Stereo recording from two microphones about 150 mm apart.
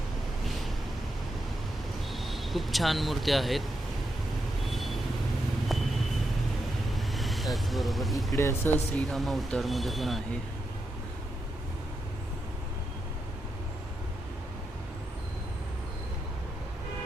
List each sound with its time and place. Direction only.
2.1 s speech: centre (ahead or behind)
6.9 s vehicle: centre (ahead or behind)
8.4 s speech: 15° left (ahead or behind)
9.0 s speech: centre (ahead or behind)